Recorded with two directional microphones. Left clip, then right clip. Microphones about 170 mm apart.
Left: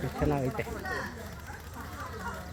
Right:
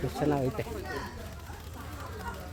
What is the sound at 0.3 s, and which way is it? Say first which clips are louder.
Speech: right 2 dB; 25° right (ahead or behind).